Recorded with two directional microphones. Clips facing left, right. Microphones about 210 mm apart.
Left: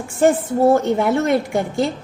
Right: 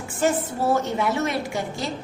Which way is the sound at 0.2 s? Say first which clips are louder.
Left 8 dB; 55° left (ahead or behind).